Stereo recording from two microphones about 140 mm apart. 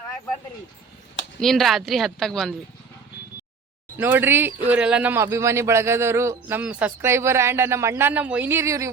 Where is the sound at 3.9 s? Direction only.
15° right (ahead or behind).